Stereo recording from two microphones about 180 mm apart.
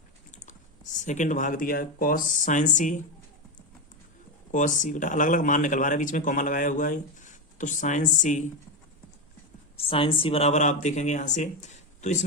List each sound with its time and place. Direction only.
0.9 s speech: 45° left (ahead or behind)
4.5 s speech: 45° left (ahead or behind)
9.7 s speech: 30° left (ahead or behind)